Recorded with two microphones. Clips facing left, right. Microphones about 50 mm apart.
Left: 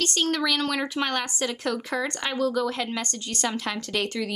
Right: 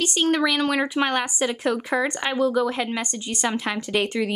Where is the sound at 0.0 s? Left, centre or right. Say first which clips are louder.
Right 4 dB; centre.